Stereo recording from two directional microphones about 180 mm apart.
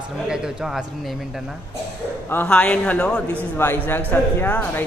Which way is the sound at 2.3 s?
10° left (ahead or behind).